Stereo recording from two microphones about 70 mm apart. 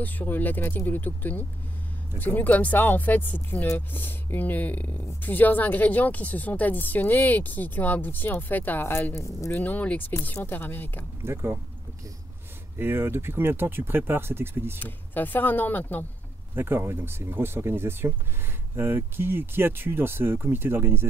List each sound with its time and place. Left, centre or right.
0.0 s speech: left
9.2 s speech: left
9.6 s speech: left
11.3 s speech: right
12.7 s speech: right
14.8 s speech: left
16.5 s speech: right